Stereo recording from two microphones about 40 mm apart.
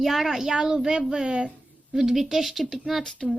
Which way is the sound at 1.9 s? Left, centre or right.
Centre.